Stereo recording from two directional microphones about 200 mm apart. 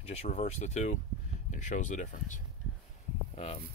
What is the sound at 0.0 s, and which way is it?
Speech, 35° left (ahead or behind).